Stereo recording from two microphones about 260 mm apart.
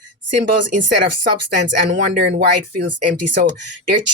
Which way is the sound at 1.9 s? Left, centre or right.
Right.